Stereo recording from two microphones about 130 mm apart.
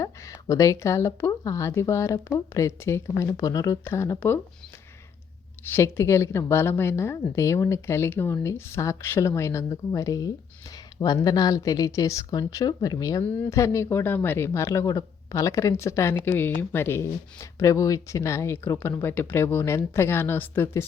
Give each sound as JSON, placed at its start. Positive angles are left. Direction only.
{"t": 0.0, "sound": "speech", "side_deg": 25}
{"t": 5.7, "sound": "speech", "side_deg": 20}